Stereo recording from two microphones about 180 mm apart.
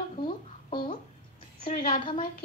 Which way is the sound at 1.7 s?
40° left (ahead or behind).